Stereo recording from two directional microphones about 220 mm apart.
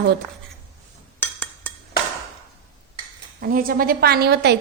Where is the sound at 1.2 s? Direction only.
10° left (ahead or behind).